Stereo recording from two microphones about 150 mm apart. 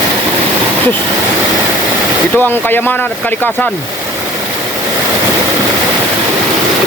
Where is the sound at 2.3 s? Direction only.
15° left (ahead or behind).